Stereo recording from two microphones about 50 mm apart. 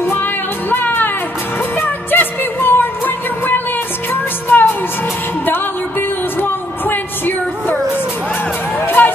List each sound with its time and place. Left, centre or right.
0.0 s music: left
4.1 s music: left
8.8 s music: left